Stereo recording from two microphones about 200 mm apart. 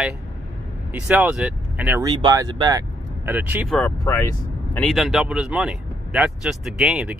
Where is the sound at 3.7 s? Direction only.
10° left (ahead or behind).